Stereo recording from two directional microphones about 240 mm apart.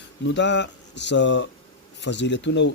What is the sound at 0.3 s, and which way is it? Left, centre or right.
Speech, left.